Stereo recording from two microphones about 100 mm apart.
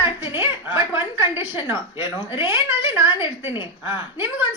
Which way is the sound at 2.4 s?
25° right (ahead or behind).